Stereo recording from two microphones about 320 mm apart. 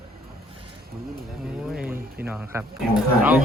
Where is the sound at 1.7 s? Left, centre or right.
Centre.